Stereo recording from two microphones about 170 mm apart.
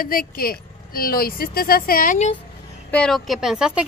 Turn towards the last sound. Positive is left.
turn(degrees=-5)  # may be behind; listen again after turning